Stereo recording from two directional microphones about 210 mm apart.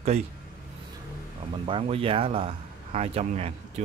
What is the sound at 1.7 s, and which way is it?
Speech, 25° right (ahead or behind).